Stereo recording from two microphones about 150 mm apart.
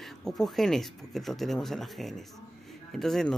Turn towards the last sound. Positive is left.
turn(degrees=0)  # may be behind; listen again after turning